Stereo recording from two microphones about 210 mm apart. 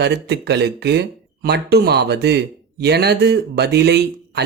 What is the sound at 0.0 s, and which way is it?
Speech, 50° right (ahead or behind).